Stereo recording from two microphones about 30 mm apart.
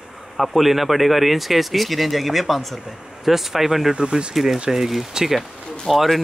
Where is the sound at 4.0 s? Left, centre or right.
Right.